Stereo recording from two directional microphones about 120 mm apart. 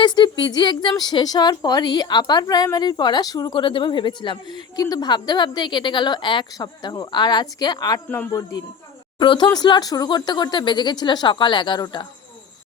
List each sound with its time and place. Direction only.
0.0 s a woman's voice: 40° left (ahead or behind)
3.6 s a woman's voice: 45° left (ahead or behind)
9.1 s a woman's voice: 45° left (ahead or behind)